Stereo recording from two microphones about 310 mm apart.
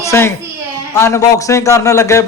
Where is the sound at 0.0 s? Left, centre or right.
Centre.